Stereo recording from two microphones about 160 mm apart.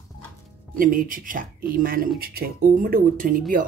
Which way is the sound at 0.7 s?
60° right (ahead or behind).